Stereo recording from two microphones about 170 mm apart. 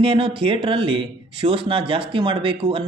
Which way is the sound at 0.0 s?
30° right (ahead or behind).